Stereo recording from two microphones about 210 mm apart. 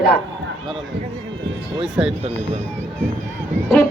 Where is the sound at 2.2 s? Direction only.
30° right (ahead or behind).